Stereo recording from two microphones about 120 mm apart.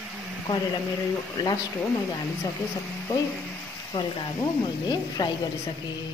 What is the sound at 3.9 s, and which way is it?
A woman's voice, 35° left (ahead or behind).